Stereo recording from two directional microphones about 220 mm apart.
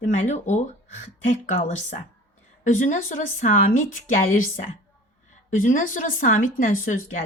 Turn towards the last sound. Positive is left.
turn(degrees=35)  # may be behind; listen again after turning